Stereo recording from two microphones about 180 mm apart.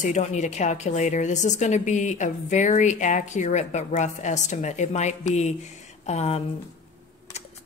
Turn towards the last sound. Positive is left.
turn(degrees=40)  # may be behind; listen again after turning